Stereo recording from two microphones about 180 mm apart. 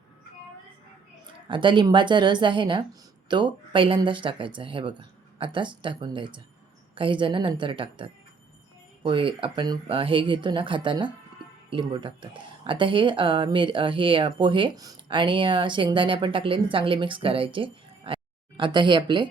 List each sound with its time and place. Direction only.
1.3 s speech: 25° right (ahead or behind)